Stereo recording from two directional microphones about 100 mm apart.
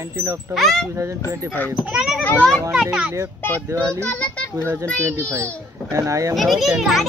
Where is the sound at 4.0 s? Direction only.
15° left (ahead or behind).